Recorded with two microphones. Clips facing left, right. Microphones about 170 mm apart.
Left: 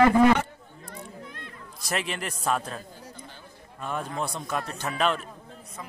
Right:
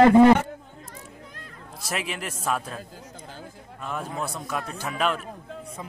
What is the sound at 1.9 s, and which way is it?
Speech, 5° right (ahead or behind).